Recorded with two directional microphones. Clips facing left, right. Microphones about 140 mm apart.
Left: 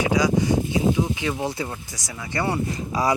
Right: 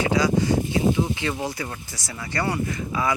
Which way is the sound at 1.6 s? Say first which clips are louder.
Left 1 dB; 15° left (ahead or behind).